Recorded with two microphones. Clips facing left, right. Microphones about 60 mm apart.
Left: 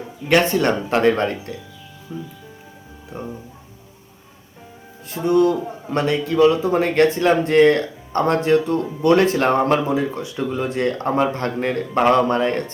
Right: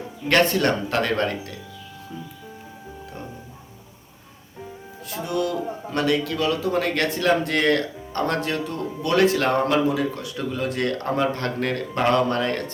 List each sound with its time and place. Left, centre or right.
0.3 s speech: centre
5.1 s speech: left